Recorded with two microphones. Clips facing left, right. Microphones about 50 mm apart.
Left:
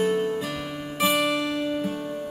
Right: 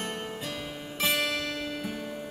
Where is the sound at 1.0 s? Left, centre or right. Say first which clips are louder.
Left 5 dB; left.